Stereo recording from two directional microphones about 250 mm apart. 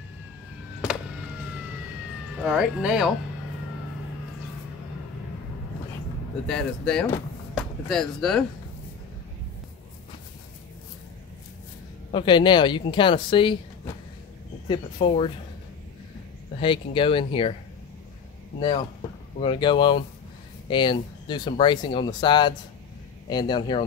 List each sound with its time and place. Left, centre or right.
2.4 s speech: centre
6.4 s speech: centre
12.1 s speech: centre
15.0 s speech: left
16.5 s speech: left
19.4 s speech: centre